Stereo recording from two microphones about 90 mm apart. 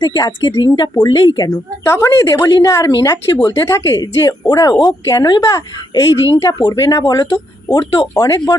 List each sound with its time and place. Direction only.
0.0 s speech: 50° left (ahead or behind)
1.8 s speech: 30° left (ahead or behind)
6.6 s speech: 45° left (ahead or behind)
8.2 s speech: 45° left (ahead or behind)